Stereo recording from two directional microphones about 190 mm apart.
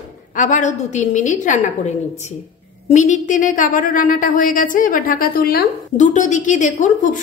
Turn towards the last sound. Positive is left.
turn(degrees=40)  # may be behind; listen again after turning